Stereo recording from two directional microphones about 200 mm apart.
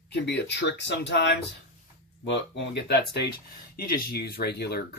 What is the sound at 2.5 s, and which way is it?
Speech, 60° left (ahead or behind).